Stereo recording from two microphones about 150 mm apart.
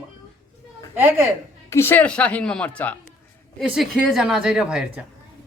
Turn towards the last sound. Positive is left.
turn(degrees=-5)  # may be behind; listen again after turning